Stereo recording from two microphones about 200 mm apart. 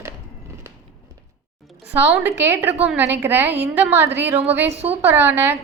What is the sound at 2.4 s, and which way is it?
A woman's voice, 10° right (ahead or behind).